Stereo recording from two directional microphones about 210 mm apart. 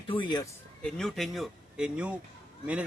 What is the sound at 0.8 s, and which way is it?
Speech, 5° left (ahead or behind).